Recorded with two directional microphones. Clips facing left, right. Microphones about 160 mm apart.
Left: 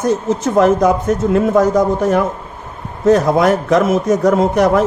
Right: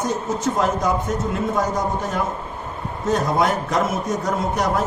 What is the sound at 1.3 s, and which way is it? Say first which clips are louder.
A man's voice: left 12 dB; 90° left.